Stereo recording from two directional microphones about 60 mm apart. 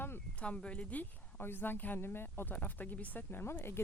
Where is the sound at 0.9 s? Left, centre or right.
Left.